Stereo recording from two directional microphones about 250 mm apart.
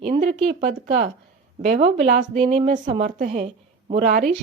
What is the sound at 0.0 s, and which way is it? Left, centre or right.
A woman's voice, right.